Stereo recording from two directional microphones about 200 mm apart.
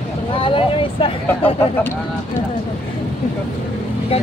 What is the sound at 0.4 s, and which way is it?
Vehicle, 25° left (ahead or behind).